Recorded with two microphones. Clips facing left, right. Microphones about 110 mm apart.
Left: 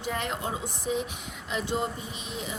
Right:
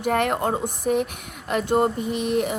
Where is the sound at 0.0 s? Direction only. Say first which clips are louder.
Right 10 dB; 60° right (ahead or behind).